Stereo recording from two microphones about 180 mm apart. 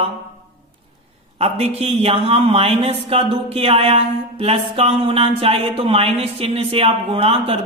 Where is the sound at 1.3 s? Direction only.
35° right (ahead or behind).